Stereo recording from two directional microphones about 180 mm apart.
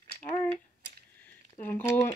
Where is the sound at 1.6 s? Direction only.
15° left (ahead or behind).